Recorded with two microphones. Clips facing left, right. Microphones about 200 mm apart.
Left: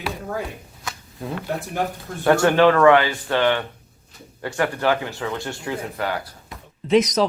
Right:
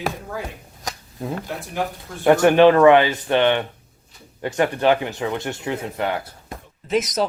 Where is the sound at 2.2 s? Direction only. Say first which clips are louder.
Right 3 dB; 20° right (ahead or behind).